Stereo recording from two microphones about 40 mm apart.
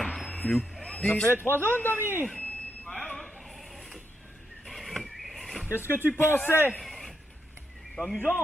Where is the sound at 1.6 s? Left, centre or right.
Left.